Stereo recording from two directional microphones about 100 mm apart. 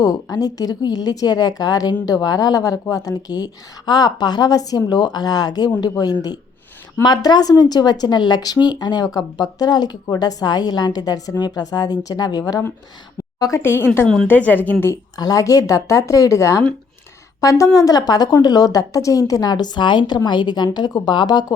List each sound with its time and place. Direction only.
0.0 s a woman's voice: 40° left (ahead or behind)
7.0 s a woman's voice: 45° left (ahead or behind)
13.6 s a woman's voice: 20° left (ahead or behind)
15.1 s a woman's voice: 40° left (ahead or behind)